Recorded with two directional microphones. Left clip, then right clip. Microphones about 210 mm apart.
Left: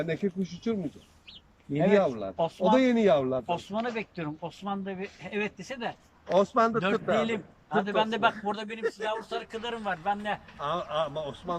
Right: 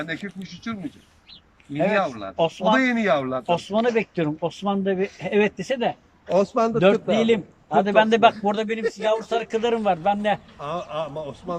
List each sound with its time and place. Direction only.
0.0 s speech: 35° left (ahead or behind)
2.0 s speech: 25° left (ahead or behind)
2.4 s speech: 10° right (ahead or behind)
2.8 s speech: 20° left (ahead or behind)
3.4 s speech: 25° right (ahead or behind)
6.3 s speech: 10° right (ahead or behind)
6.7 s a man's voice: 45° right (ahead or behind)
10.6 s speech: 5° right (ahead or behind)